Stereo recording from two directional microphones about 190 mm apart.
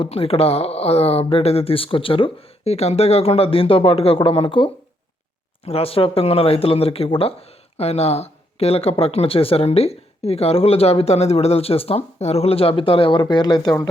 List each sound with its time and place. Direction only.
0.0 s speech: 30° left (ahead or behind)